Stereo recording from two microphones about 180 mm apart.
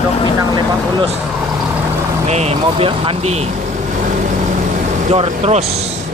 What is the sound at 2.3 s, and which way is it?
Speech, 35° right (ahead or behind).